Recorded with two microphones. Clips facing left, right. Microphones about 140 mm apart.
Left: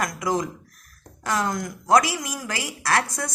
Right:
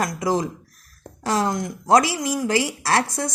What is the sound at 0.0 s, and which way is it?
A woman's voice, 30° right (ahead or behind).